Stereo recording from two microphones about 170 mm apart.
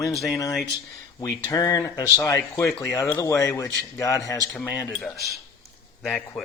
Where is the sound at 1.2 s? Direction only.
20° left (ahead or behind).